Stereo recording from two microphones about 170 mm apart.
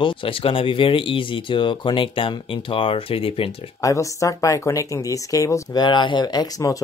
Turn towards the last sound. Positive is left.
turn(degrees=20)  # may be behind; listen again after turning